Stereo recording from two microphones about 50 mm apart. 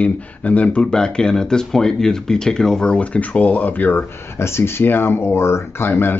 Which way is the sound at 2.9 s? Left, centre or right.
Left.